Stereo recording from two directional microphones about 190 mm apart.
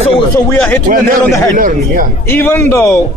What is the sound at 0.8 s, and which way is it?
Speech, 45° right (ahead or behind).